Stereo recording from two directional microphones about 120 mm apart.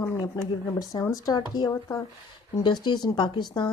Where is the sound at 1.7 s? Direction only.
25° left (ahead or behind).